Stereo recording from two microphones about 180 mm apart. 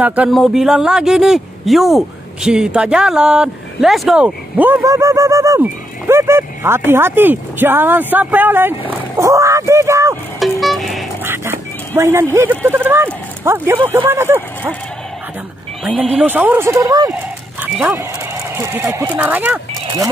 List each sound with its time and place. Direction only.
0.0 s a man's voice: 5° right (ahead or behind)
10.4 s music: centre (ahead or behind)
11.2 s a man's voice: 15° right (ahead or behind)
15.8 s a man's voice: 10° right (ahead or behind)
17.1 s dog: 10° right (ahead or behind)
18.6 s a man's voice: 15° right (ahead or behind)